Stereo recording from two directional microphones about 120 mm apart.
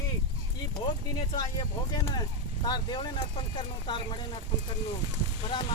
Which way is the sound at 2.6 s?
35° left (ahead or behind).